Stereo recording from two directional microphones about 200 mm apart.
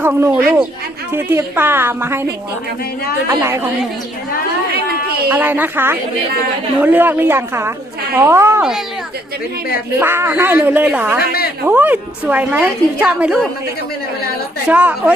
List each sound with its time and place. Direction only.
0.0 s a woman's voice: 10° right (ahead or behind)
3.2 s a woman's voice: 15° right (ahead or behind)
5.3 s a woman's voice: 10° right (ahead or behind)
10.0 s a woman's voice: 10° right (ahead or behind)
11.2 s a woman's voice: 50° left (ahead or behind)
11.6 s a woman's voice: 10° right (ahead or behind)
14.7 s a woman's voice: 5° right (ahead or behind)